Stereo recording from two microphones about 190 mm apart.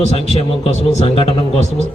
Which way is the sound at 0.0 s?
30° left (ahead or behind).